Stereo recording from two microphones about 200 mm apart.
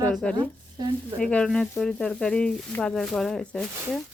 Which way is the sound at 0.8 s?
20° right (ahead or behind).